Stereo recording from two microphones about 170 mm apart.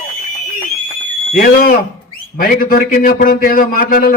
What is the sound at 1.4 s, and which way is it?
Speech, 55° left (ahead or behind).